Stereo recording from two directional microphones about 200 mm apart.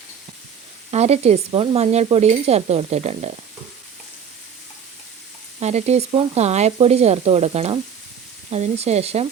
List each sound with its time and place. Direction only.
0.9 s speech: 30° right (ahead or behind)
5.5 s speech: 35° right (ahead or behind)